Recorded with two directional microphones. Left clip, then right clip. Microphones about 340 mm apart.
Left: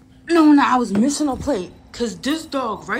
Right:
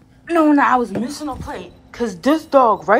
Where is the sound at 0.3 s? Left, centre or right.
Centre.